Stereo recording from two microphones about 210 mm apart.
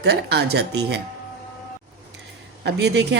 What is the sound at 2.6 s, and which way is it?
Speech, 55° right (ahead or behind).